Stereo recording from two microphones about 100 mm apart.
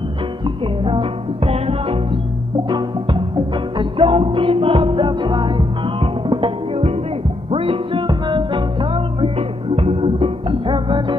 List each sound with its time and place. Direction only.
0.8 s music: 70° right (ahead or behind)
3.7 s music: 65° right (ahead or behind)
9.8 s music: 70° right (ahead or behind); by 11.1 s 55° right (ahead or behind)